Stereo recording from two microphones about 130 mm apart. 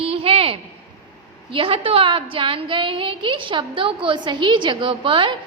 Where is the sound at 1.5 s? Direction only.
45° right (ahead or behind).